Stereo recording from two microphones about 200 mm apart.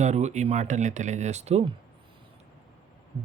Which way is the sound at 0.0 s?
35° right (ahead or behind).